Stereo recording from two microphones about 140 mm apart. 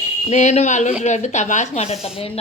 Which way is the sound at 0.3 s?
55° left (ahead or behind).